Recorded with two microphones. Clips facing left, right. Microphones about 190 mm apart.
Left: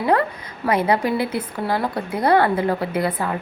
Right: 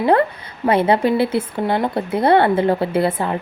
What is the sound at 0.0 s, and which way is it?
A woman's voice, 25° right (ahead or behind).